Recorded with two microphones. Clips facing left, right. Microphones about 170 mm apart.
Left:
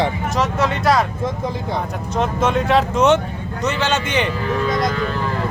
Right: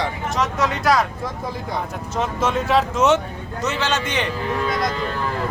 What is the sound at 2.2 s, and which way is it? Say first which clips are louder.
Speech: left 3 dB; 5° right (ahead or behind).